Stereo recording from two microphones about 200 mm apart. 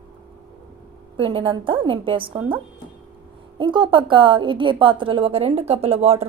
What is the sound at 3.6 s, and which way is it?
A woman's voice, 25° right (ahead or behind).